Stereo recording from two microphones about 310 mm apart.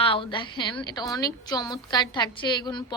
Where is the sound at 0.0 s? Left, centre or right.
Centre.